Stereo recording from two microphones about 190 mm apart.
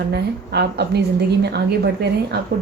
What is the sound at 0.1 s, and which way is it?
A woman's voice, 60° right (ahead or behind).